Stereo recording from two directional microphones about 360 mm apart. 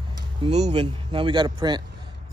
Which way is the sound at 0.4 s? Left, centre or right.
Centre.